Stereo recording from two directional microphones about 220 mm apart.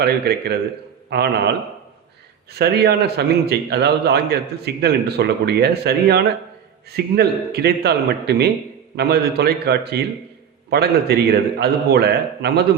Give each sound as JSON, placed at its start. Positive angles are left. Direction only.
{"t": 0.0, "sound": "a man's voice", "side_deg": -45}
{"t": 2.5, "sound": "a man's voice", "side_deg": -45}